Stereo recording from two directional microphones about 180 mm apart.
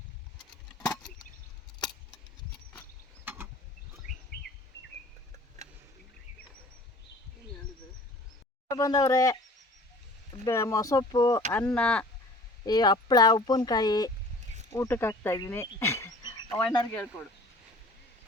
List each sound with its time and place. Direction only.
0.8 s a sound: 20° left (ahead or behind)
3.2 s a sound: 10° right (ahead or behind)
4.3 s bird: 60° left (ahead or behind)
8.7 s speech: 20° left (ahead or behind)
10.4 s speech: 15° left (ahead or behind)
11.5 s speech: 5° left (ahead or behind)
12.6 s speech: 20° left (ahead or behind)